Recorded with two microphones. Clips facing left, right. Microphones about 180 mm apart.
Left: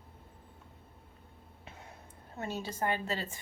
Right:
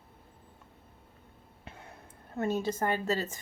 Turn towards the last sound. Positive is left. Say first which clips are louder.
# right 4 dB
turn(degrees=-45)  # may be behind; listen again after turning